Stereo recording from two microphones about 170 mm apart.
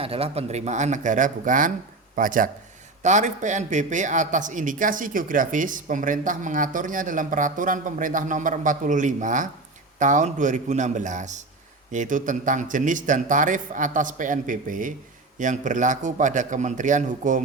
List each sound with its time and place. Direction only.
0.0 s speech: 35° right (ahead or behind)